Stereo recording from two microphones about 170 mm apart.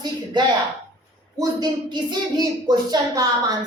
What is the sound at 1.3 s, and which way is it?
Speech, 25° right (ahead or behind).